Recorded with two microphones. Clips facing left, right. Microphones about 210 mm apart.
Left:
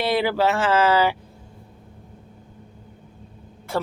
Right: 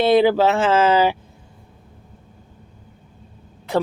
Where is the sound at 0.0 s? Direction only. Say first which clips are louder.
Right 6 dB; 20° right (ahead or behind).